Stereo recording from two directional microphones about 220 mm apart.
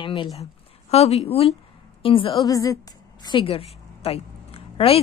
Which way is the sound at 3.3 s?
25° left (ahead or behind).